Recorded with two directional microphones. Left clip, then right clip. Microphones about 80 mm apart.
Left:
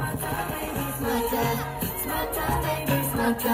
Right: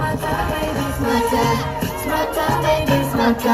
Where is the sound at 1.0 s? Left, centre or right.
Left.